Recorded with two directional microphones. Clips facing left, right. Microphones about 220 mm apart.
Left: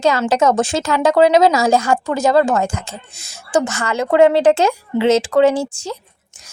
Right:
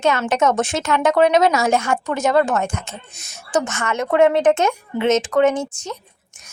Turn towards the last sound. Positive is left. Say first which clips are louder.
# left 3 dB
turn(degrees=30)  # may be behind; listen again after turning